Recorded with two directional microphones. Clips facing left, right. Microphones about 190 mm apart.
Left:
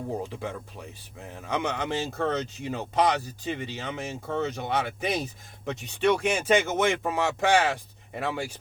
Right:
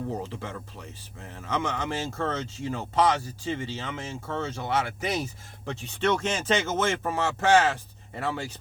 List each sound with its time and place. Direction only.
0.2 s speech: 15° left (ahead or behind)